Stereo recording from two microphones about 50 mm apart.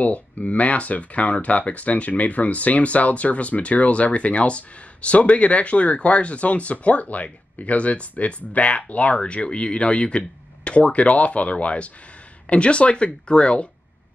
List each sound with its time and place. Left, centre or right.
0.0 s speech: left